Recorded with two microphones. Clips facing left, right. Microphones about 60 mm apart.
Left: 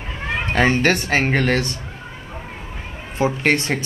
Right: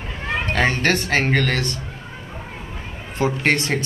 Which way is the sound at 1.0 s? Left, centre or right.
Centre.